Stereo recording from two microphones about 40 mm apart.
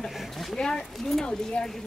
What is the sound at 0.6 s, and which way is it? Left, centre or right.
Speech, centre.